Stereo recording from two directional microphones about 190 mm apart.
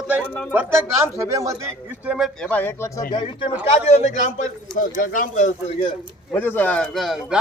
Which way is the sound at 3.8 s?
35° left (ahead or behind).